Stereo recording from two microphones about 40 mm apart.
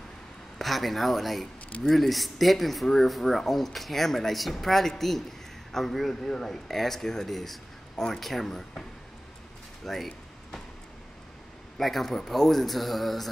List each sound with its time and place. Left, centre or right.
0.6 s speech: centre
9.8 s a sound: centre
11.8 s speech: centre